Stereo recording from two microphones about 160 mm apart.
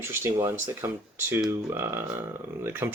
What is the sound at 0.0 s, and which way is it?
Speech, 15° right (ahead or behind).